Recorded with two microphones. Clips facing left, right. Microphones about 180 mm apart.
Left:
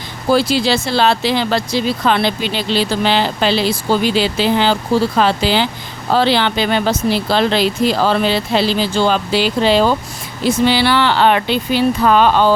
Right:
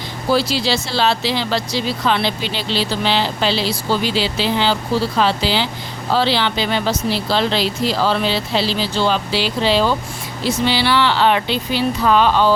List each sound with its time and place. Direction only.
0.3 s speech: 50° left (ahead or behind)